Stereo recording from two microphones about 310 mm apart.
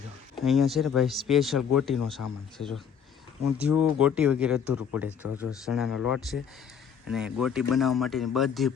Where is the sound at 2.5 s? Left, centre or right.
Centre.